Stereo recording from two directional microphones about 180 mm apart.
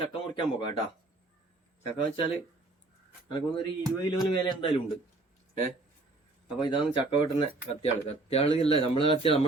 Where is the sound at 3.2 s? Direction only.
25° left (ahead or behind).